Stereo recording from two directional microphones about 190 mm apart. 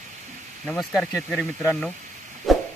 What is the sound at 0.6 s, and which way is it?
Bell, centre (ahead or behind).